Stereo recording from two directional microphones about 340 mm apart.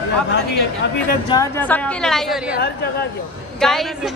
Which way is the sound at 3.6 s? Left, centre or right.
Centre.